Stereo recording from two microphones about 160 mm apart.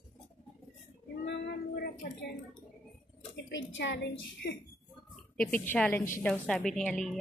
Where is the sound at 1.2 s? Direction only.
85° left.